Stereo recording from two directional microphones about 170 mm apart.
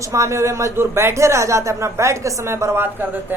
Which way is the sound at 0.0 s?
20° right (ahead or behind).